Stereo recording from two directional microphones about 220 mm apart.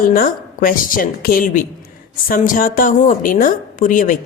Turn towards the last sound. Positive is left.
turn(degrees=35)  # may be behind; listen again after turning